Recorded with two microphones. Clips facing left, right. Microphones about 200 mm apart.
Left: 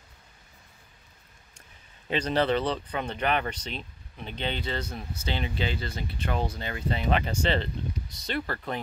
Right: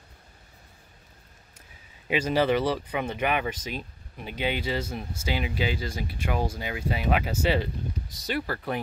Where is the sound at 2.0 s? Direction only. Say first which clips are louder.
Right 2 dB; 10° right (ahead or behind).